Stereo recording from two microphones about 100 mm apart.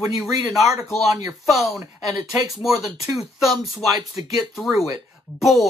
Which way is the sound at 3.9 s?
40° right (ahead or behind).